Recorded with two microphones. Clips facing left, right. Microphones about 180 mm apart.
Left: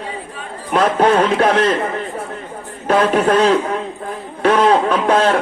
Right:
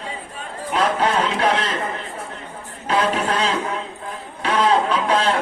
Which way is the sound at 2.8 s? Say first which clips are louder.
Left 6 dB; 55° left (ahead or behind).